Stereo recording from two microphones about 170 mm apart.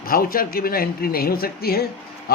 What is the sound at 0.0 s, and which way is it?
A man's voice, 60° left (ahead or behind).